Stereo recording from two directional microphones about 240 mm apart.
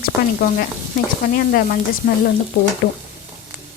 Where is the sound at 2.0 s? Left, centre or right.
Left.